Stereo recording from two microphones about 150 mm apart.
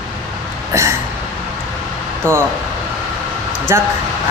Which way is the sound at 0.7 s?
20° right (ahead or behind).